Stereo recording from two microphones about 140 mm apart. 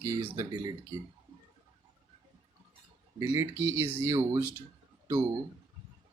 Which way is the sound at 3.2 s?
20° right (ahead or behind).